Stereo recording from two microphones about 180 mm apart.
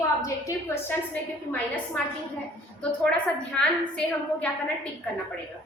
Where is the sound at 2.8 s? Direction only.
5° left (ahead or behind).